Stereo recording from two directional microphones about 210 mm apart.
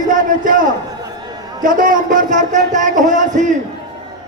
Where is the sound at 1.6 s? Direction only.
40° right (ahead or behind).